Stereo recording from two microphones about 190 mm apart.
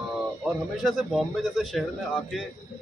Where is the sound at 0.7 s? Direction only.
Centre (ahead or behind).